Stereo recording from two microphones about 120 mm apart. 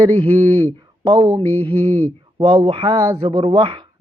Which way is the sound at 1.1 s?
35° right (ahead or behind).